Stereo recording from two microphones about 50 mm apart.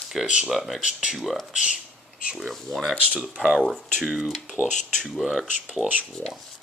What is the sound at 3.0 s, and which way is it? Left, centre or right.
Speech, right.